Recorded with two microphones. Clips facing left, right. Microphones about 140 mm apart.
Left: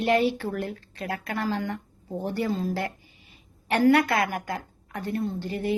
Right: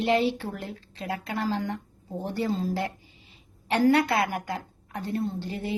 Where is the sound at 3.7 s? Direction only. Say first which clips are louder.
Left 1 dB; 25° right (ahead or behind).